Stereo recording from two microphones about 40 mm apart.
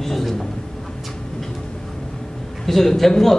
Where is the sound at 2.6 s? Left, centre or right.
Centre.